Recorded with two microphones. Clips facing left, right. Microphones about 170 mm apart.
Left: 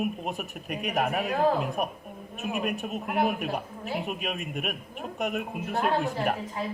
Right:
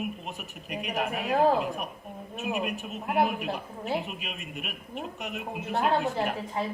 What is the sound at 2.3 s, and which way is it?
Speech, 50° left (ahead or behind).